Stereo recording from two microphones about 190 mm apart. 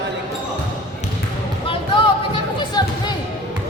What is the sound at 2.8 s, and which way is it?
Music, 20° left (ahead or behind).